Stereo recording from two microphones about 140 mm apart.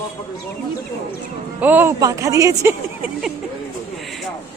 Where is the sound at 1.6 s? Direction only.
15° right (ahead or behind).